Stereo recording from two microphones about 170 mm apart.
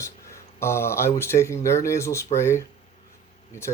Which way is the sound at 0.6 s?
15° left (ahead or behind).